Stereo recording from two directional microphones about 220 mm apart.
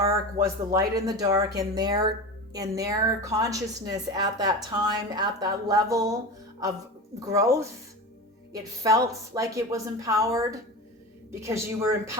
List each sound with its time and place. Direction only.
0.0 s a woman's voice: 15° right (ahead or behind)
7.3 s a woman's voice: 15° right (ahead or behind)